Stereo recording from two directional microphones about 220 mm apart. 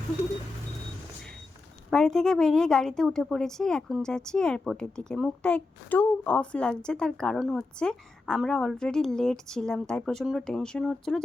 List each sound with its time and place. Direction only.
1.9 s a woman's voice: centre (ahead or behind)